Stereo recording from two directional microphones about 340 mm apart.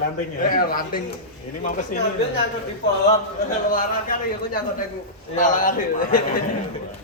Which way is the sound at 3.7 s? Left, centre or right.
Left.